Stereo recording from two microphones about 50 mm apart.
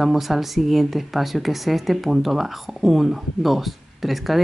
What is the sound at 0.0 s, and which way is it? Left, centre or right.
Speech, centre.